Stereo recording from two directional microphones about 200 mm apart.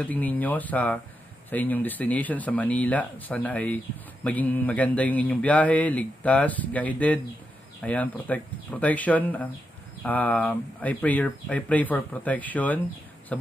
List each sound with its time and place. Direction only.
0.0 s a man's voice: 10° left (ahead or behind)